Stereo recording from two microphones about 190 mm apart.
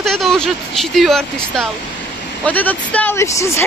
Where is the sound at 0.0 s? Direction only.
Centre (ahead or behind).